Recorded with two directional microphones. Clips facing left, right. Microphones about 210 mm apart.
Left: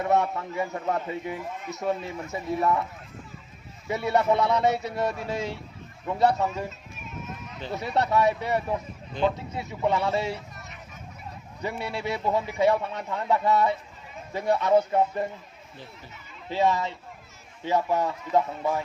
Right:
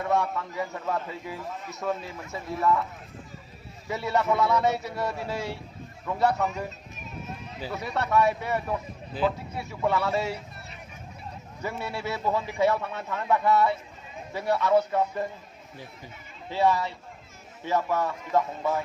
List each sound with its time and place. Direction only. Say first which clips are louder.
0.0 s a man's voice: left 2 dB; 20° left (ahead or behind)
3.8 s a man's voice: left 3 dB; 20° left (ahead or behind)
8.1 s a man's voice: right 1 dB; 20° left (ahead or behind)
9.2 s speech: left 1 dB; 5° right (ahead or behind)
9.6 s a man's voice: left 1 dB; 20° left (ahead or behind)
11.6 s a man's voice: left 2 dB; 15° left (ahead or behind)
16.5 s a man's voice: even; 20° left (ahead or behind)